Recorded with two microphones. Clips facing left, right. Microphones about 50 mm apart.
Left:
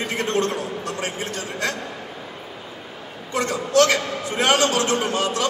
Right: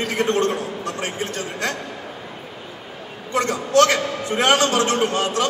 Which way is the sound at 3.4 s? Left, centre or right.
Right.